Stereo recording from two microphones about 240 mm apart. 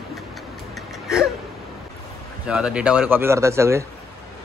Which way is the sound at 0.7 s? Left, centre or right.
Centre.